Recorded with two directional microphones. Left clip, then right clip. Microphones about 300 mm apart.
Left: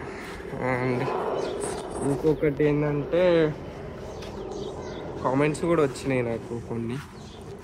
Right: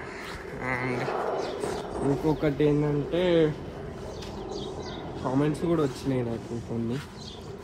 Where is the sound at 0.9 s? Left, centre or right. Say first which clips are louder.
Left 2 dB; left.